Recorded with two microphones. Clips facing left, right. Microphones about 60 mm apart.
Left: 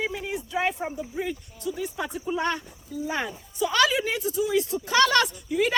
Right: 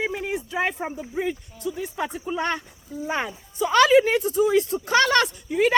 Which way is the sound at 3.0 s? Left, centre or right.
Right.